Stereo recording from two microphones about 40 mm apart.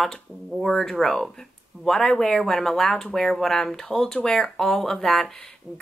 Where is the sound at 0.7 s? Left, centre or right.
Centre.